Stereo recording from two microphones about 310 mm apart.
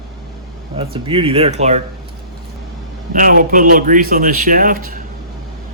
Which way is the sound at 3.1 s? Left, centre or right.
Right.